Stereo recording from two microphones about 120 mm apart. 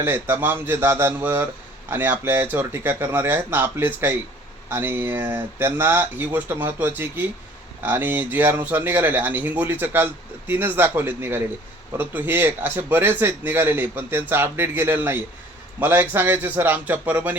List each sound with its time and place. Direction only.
0.0 s a man's voice: 20° right (ahead or behind)